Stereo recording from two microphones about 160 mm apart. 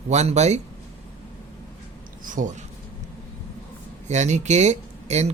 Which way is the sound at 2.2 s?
55° right (ahead or behind).